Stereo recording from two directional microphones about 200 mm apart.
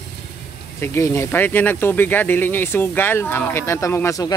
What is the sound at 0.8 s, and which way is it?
Speech, 15° left (ahead or behind).